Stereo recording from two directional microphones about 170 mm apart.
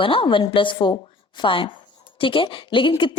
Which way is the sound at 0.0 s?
30° left (ahead or behind).